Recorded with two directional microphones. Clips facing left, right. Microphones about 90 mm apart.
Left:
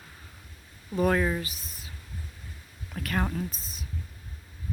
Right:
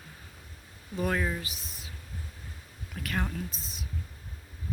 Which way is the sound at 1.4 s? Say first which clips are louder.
Even; 40° left (ahead or behind).